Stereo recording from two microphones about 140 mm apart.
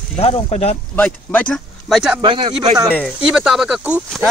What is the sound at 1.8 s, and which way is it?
Speech, centre (ahead or behind).